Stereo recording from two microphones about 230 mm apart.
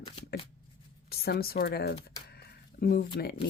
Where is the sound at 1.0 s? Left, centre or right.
Left.